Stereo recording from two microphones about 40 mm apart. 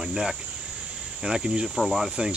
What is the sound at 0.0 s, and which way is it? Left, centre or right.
Speech, centre.